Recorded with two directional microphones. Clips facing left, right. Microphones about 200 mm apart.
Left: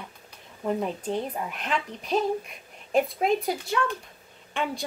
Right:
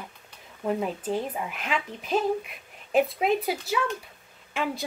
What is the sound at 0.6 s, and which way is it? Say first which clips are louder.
A child's voice: even; 5° right (ahead or behind).